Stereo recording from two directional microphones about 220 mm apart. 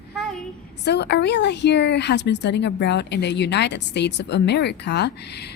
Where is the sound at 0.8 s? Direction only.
50° left (ahead or behind).